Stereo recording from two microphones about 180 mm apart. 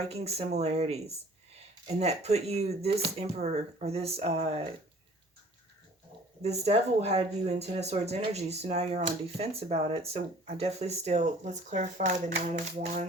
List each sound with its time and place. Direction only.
0.0 s speech: 35° right (ahead or behind)
6.4 s speech: 35° right (ahead or behind)